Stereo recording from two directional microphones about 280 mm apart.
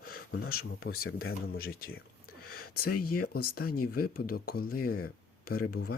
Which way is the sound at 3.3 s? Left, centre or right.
Left.